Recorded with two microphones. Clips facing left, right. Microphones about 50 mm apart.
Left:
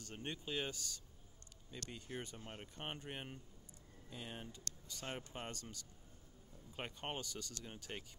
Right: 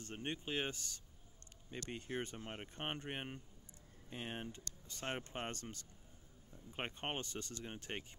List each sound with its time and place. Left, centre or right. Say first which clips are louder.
0.0 s speech: right 3 dB; right